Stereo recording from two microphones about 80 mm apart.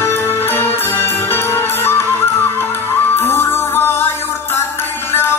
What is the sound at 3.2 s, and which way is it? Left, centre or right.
Music, left.